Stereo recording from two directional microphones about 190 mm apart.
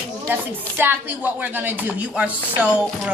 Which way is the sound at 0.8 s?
10° right (ahead or behind).